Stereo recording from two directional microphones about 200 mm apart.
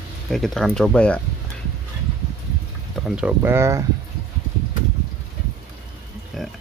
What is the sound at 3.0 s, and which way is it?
Speech, 5° right (ahead or behind).